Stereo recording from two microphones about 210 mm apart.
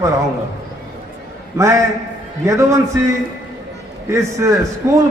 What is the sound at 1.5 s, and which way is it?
A man's voice, 15° right (ahead or behind).